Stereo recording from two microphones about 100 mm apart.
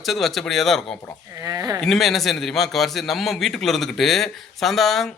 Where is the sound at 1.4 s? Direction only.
35° right (ahead or behind).